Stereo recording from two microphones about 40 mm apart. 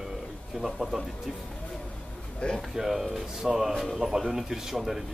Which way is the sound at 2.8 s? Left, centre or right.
Centre.